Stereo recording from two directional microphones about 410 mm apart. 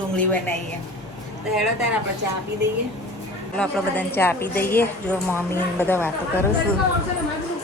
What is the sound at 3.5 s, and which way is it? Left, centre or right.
A woman's voice, centre.